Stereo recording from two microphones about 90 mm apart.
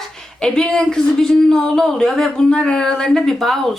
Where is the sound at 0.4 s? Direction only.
10° left (ahead or behind).